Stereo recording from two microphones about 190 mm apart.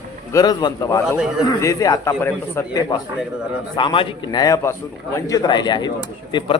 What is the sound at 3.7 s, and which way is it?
A man's voice, 25° left (ahead or behind).